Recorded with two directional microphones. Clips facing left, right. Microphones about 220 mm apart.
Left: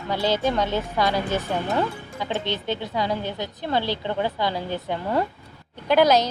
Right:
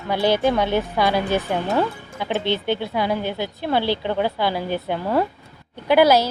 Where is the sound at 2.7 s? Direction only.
10° right (ahead or behind).